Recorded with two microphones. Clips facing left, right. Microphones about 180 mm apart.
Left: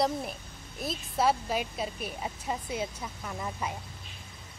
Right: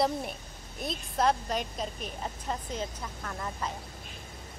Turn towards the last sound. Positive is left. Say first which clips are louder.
# left 1 dB
turn(degrees=10)  # may be behind; listen again after turning